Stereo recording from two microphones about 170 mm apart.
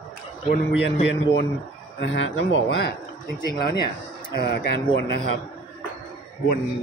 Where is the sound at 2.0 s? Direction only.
90° left.